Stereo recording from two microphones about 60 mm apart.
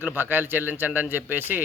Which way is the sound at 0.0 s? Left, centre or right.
Right.